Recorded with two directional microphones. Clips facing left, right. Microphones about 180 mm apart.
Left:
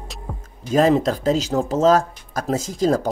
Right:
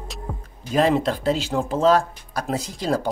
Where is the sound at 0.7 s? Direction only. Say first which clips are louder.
Left 3 dB; 40° left (ahead or behind).